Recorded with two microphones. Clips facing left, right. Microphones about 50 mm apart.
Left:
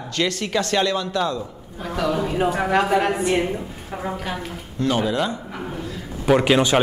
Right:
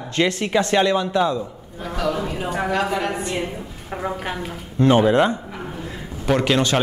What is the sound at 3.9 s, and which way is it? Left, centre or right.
Speech, centre.